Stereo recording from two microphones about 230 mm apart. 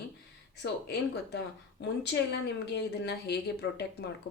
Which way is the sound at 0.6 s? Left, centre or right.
Left.